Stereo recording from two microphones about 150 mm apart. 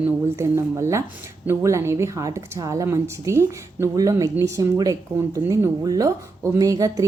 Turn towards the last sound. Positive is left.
turn(degrees=-25)  # may be behind; listen again after turning